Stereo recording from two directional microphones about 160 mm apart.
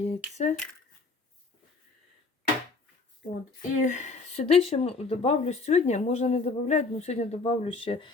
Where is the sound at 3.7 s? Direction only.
50° left (ahead or behind).